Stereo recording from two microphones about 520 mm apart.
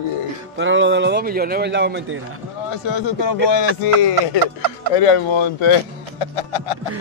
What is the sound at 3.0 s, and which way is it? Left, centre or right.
Speech, left.